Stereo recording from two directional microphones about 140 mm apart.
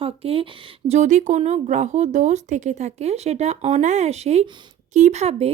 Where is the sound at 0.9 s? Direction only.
60° right (ahead or behind).